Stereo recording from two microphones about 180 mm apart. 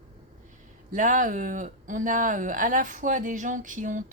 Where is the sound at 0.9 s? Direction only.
45° right (ahead or behind).